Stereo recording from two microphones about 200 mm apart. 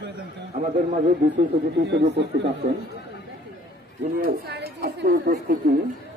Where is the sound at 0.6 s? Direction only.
40° right (ahead or behind).